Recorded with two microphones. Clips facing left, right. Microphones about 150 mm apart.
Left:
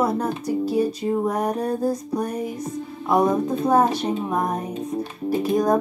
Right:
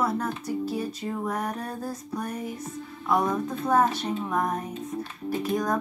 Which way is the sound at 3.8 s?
15° left (ahead or behind).